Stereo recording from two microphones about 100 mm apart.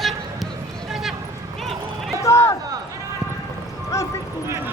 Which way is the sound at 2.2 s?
30° left (ahead or behind).